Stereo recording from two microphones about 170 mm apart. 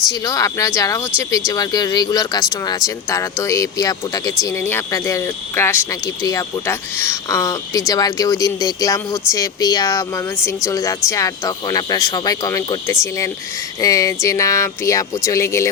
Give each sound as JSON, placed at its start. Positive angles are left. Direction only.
{"t": 0.3, "sound": "speech", "side_deg": 20}